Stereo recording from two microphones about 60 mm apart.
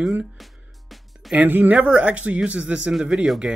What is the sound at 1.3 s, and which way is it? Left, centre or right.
Speech, right.